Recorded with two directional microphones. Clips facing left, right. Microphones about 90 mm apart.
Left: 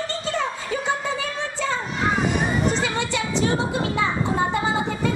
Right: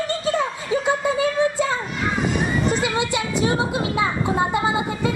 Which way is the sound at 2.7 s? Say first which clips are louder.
Right 2 dB; 10° right (ahead or behind).